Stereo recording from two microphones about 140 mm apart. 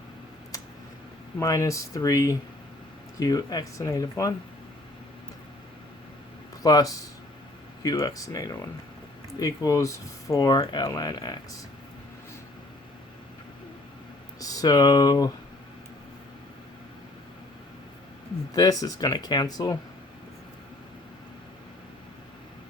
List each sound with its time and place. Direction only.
1.4 s speech: 25° left (ahead or behind)
6.6 s speech: 25° left (ahead or behind)
14.3 s speech: 25° left (ahead or behind)
18.5 s speech: 25° left (ahead or behind)